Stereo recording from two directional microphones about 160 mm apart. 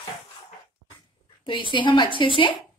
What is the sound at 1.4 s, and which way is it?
A woman's voice, 30° left (ahead or behind).